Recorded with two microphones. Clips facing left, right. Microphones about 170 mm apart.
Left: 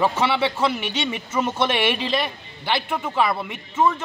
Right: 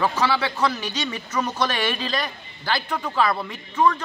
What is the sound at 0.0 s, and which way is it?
Speech, 25° left (ahead or behind).